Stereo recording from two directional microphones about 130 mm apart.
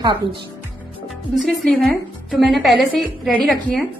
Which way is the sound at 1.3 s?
Centre (ahead or behind).